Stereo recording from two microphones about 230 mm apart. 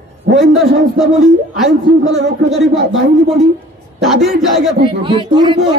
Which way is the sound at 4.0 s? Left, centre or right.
Centre.